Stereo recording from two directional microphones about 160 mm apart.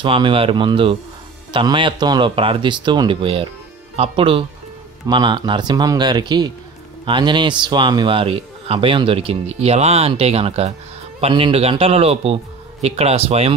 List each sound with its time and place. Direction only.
0.0 s a man's voice: 30° right (ahead or behind)